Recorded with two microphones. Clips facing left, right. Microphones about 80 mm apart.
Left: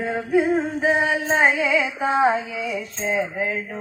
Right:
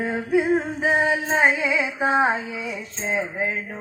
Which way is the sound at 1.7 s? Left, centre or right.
Right.